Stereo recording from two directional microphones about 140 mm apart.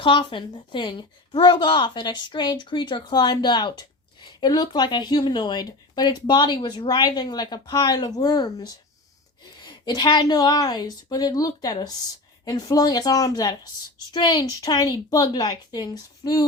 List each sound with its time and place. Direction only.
0.0 s a woman's voice: 35° left (ahead or behind)